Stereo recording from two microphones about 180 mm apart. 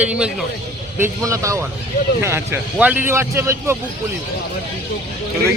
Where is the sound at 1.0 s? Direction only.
15° right (ahead or behind).